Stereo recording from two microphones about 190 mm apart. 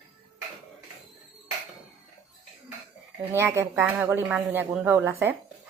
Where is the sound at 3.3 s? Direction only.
15° right (ahead or behind).